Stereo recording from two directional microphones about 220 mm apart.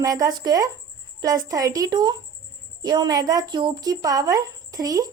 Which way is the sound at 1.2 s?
15° right (ahead or behind).